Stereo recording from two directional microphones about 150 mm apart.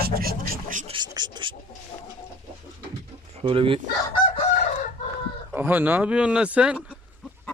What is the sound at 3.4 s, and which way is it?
Speech, 35° right (ahead or behind).